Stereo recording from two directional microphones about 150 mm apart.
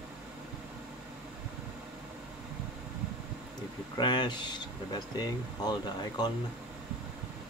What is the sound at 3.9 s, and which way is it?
Speech, 30° left (ahead or behind).